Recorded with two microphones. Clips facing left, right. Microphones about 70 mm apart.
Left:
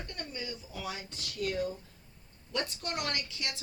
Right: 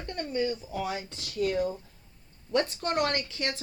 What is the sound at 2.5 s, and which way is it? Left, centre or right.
Speech, right.